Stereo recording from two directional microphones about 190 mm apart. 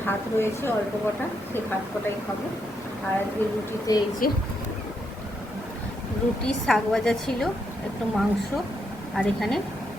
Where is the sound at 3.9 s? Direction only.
20° left (ahead or behind).